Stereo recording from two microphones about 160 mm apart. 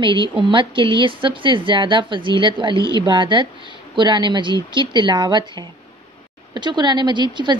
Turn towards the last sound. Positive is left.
turn(degrees=-30)  # may be behind; listen again after turning